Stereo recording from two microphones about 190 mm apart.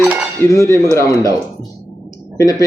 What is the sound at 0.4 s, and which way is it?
Speech, 15° left (ahead or behind).